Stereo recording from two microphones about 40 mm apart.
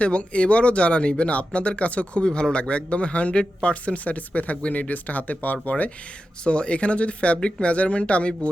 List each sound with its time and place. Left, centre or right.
0.0 s speech: left
6.4 s speech: left